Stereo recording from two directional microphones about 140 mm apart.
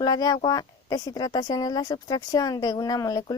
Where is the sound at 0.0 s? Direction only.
25° left (ahead or behind).